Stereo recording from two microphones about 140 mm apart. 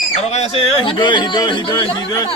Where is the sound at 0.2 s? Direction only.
50° left (ahead or behind).